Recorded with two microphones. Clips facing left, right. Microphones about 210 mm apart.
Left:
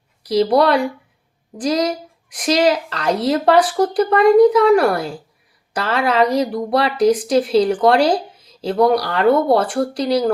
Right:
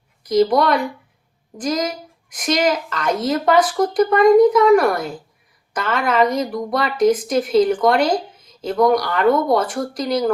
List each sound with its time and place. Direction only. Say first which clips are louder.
0.2 s a woman's voice: left 1 dB; 30° left (ahead or behind)